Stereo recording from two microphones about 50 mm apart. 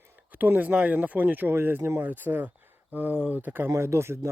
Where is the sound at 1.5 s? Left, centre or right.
Right.